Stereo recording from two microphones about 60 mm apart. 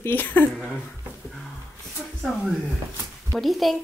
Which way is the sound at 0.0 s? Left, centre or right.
Left.